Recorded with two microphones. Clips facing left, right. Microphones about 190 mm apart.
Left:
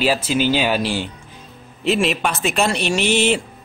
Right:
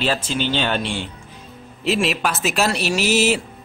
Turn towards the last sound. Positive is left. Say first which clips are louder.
# left 1 dB
turn(degrees=-5)  # may be behind; listen again after turning